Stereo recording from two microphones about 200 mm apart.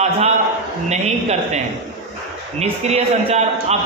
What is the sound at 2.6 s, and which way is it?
A man's voice, 30° right (ahead or behind).